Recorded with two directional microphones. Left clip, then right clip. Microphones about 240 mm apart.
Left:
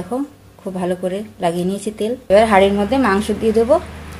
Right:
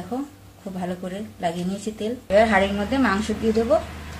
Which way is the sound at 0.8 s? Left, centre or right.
Left.